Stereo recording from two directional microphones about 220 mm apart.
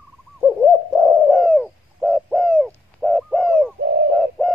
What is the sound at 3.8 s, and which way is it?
Bird, 50° right (ahead or behind).